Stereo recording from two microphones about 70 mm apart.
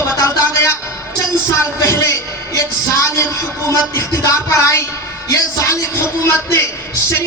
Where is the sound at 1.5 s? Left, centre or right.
Left.